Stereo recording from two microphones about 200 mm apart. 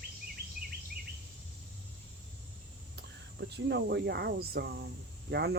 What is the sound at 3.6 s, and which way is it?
Speech, 55° right (ahead or behind).